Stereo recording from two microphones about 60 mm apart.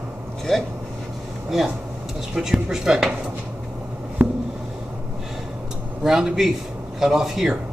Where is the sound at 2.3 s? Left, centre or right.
Centre.